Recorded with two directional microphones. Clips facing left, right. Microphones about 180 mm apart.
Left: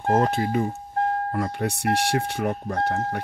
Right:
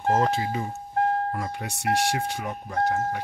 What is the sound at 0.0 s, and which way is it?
Speech, 50° left (ahead or behind).